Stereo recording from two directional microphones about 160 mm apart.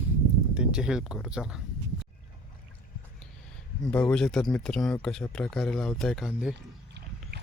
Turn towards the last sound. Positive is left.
turn(degrees=0)  # may be behind; listen again after turning